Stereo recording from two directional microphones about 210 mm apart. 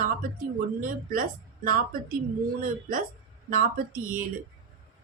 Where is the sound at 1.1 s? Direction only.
40° right (ahead or behind).